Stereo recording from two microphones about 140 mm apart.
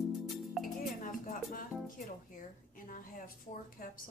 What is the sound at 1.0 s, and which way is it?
Music, 75° left (ahead or behind).